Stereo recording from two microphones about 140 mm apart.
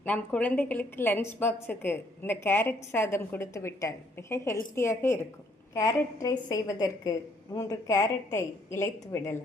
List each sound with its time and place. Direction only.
0.0 s a woman's voice: 10° left (ahead or behind)